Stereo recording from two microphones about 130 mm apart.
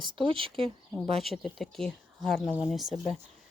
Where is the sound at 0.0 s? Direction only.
40° right (ahead or behind).